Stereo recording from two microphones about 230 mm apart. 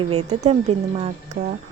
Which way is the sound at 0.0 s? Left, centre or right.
Right.